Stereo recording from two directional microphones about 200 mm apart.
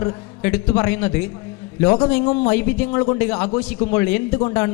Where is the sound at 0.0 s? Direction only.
20° left (ahead or behind).